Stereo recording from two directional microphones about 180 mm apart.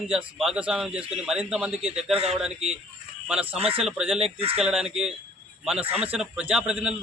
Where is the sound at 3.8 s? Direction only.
5° right (ahead or behind).